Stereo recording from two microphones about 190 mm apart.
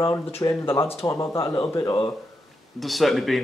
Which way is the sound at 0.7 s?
30° left (ahead or behind).